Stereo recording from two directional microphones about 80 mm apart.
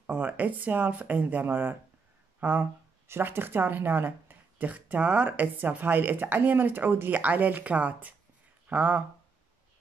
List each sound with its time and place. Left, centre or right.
0.0 s speech: right